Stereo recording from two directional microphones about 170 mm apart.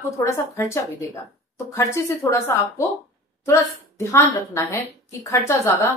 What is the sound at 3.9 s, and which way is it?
A woman's voice, 15° left (ahead or behind).